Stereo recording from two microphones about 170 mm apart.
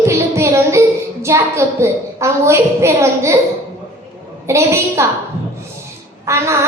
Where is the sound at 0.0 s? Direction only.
15° right (ahead or behind).